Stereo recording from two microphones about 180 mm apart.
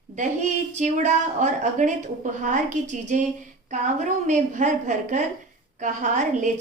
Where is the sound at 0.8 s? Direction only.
40° right (ahead or behind).